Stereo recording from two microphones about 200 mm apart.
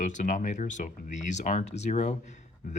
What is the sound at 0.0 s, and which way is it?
Speech, 40° left (ahead or behind).